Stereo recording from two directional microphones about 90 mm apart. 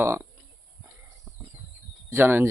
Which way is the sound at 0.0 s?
30° right (ahead or behind).